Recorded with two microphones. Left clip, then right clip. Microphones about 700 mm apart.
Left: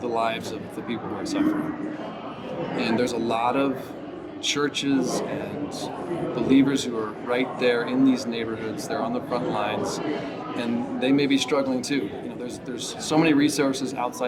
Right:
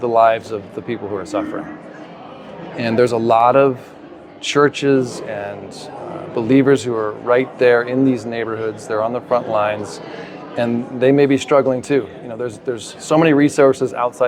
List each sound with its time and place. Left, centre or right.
0.0 s speech: right
2.7 s speech: right
6.3 s speech: right